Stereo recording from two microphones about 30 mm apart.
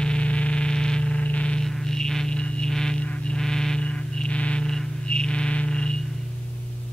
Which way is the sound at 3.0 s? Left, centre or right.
Left.